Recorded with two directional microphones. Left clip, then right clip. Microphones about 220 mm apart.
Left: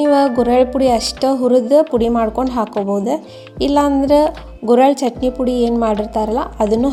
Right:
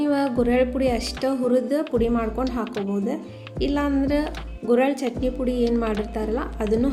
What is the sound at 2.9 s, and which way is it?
A woman's voice, 30° left (ahead or behind).